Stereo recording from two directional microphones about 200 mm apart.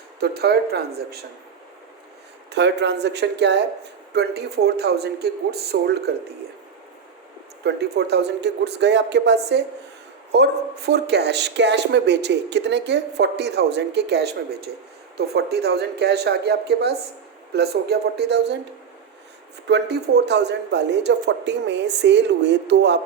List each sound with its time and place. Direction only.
0.2 s speech: 55° right (ahead or behind)
2.5 s speech: 60° right (ahead or behind)
7.6 s speech: 55° right (ahead or behind)
19.6 s speech: 55° right (ahead or behind)